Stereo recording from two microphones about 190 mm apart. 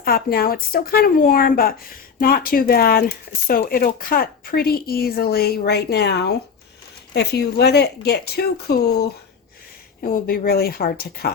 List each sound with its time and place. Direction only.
0.0 s speech: 55° left (ahead or behind)